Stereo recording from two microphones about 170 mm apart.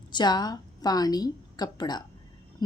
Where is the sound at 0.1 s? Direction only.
25° left (ahead or behind).